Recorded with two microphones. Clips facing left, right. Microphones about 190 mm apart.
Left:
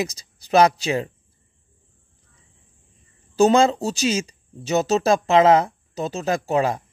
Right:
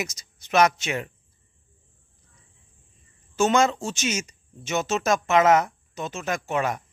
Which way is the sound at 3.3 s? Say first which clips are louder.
Left 5 dB; 35° left (ahead or behind).